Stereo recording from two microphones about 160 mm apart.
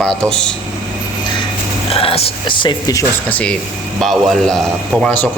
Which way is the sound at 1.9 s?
35° left (ahead or behind).